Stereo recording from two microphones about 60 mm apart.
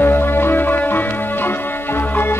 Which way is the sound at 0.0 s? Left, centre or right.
Left.